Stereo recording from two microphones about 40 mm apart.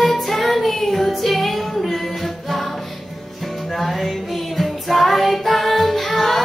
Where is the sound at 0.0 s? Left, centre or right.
Centre.